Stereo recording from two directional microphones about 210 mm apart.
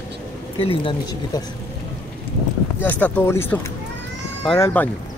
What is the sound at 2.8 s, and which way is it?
Speech, 5° left (ahead or behind).